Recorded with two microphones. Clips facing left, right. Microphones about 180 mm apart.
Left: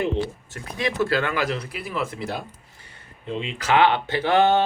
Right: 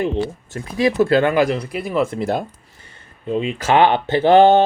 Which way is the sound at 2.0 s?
45° right (ahead or behind).